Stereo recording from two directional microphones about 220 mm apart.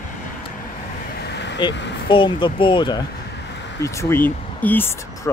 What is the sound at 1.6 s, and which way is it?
Speech, 20° left (ahead or behind).